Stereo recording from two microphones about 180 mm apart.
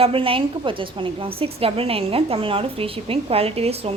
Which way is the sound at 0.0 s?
30° right (ahead or behind).